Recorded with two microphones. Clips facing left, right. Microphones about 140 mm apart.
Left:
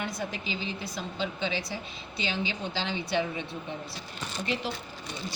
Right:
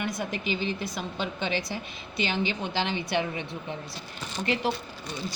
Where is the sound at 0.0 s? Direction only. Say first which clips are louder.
Right 3 dB; 65° right (ahead or behind).